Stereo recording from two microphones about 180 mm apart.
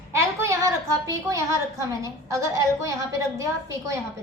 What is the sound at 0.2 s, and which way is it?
A woman's voice, 15° right (ahead or behind).